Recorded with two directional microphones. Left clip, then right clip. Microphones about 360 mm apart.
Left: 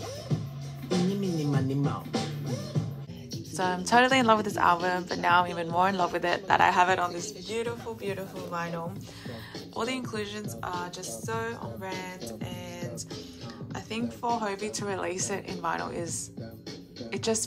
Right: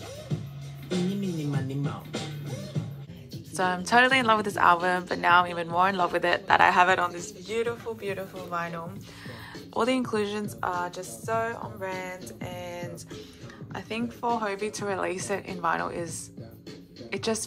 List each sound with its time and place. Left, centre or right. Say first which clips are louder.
0.8 s music: left 2 dB; left
3.5 s a woman's voice: right 1 dB; centre